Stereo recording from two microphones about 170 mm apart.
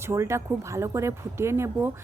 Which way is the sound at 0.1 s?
15° right (ahead or behind).